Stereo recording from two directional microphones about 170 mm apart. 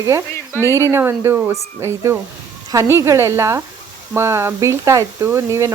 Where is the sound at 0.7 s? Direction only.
15° right (ahead or behind).